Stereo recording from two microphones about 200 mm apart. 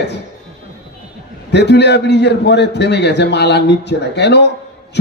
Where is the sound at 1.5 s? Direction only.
55° left (ahead or behind).